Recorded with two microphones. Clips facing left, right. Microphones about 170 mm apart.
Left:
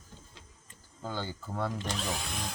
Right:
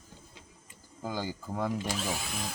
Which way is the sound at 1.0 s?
10° right (ahead or behind).